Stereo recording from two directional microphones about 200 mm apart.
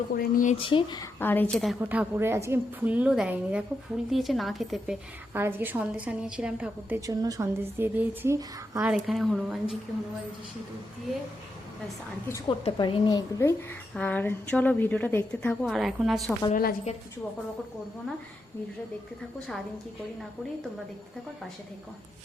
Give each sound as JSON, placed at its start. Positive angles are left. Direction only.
{"t": 0.1, "sound": "speech", "side_deg": 45}
{"t": 0.5, "sound": "speech", "side_deg": 25}
{"t": 1.2, "sound": "a woman's voice", "side_deg": 10}
{"t": 1.8, "sound": "a woman's voice", "side_deg": -10}
{"t": 8.8, "sound": "speech", "side_deg": 0}
{"t": 12.3, "sound": "a woman's voice", "side_deg": 25}
{"t": 16.5, "sound": "speech", "side_deg": 45}